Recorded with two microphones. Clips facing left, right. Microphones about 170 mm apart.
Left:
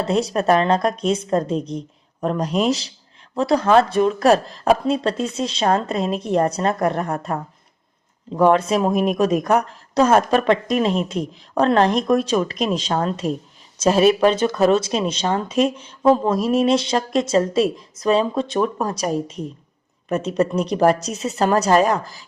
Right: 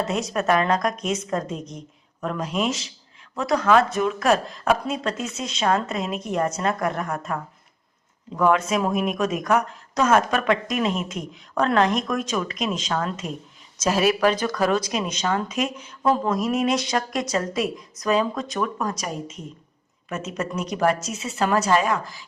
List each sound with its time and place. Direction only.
0.0 s speech: 30° left (ahead or behind)